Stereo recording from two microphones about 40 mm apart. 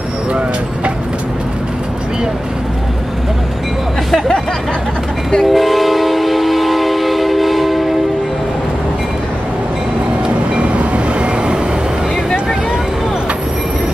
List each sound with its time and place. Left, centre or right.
5.4 s train: centre
10.6 s train: right